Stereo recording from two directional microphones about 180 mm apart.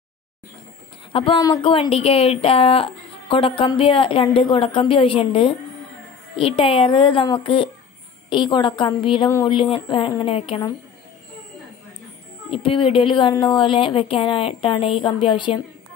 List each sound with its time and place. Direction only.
1.1 s speech: 30° left (ahead or behind)
12.4 s speech: 30° left (ahead or behind)